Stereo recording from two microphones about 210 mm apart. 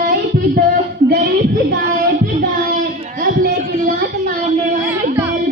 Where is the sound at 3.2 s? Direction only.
45° right (ahead or behind).